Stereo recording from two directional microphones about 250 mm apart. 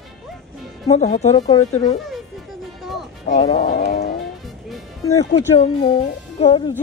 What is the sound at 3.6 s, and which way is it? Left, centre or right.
Speech, left.